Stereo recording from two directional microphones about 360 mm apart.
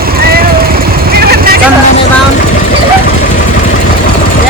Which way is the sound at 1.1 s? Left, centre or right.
Right.